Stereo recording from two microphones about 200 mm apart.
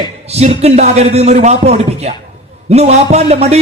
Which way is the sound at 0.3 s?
30° right (ahead or behind).